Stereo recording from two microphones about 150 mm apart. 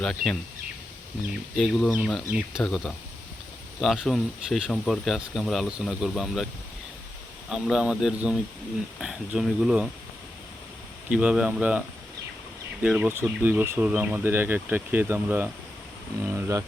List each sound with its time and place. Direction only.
0.0 s speech: 5° left (ahead or behind)
1.5 s speech: centre (ahead or behind)
7.5 s speech: centre (ahead or behind)
11.1 s speech: 5° right (ahead or behind)
12.8 s speech: 10° right (ahead or behind)